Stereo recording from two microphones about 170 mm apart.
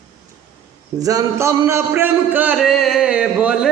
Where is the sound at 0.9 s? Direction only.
20° right (ahead or behind).